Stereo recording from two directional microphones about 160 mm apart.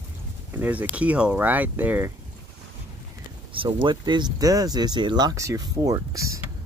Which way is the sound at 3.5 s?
35° right (ahead or behind).